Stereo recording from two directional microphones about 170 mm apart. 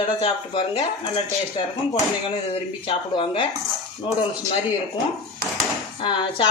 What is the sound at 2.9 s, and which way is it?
Speech, 30° left (ahead or behind).